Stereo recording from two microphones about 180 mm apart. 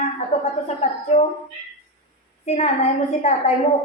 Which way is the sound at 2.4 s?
40° left (ahead or behind).